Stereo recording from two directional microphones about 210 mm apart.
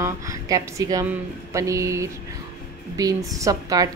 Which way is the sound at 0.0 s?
15° right (ahead or behind).